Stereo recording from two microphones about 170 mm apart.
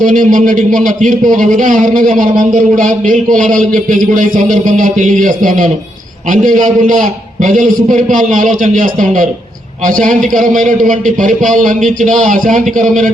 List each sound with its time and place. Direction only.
0.0 s a man's voice: 50° right (ahead or behind)